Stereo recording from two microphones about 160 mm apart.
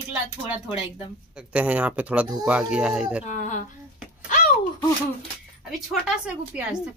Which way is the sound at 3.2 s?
50° left (ahead or behind).